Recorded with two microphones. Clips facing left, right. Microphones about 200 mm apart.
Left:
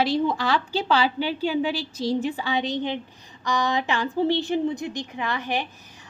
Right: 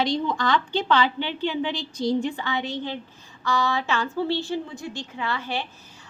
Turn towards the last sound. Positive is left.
turn(degrees=15)  # may be behind; listen again after turning